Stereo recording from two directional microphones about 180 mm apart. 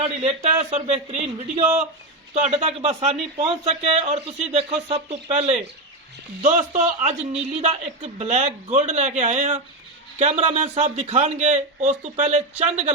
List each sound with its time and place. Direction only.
0.0 s speech: 35° right (ahead or behind)